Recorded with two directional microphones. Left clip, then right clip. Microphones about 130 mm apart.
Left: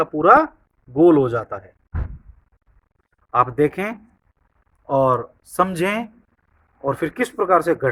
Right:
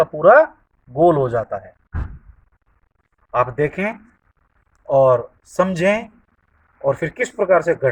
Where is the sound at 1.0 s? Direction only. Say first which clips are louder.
Even; 30° left (ahead or behind).